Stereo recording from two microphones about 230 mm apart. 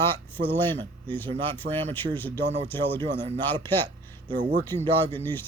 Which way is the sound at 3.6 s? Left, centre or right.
Centre.